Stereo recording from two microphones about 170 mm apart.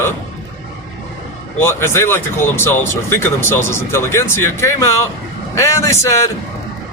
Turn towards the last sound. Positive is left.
turn(degrees=15)  # may be behind; listen again after turning